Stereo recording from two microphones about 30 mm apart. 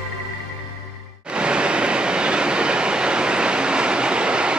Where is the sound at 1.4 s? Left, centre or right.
Right.